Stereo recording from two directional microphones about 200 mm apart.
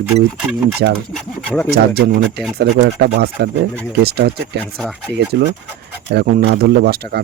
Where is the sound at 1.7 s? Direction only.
50° right (ahead or behind).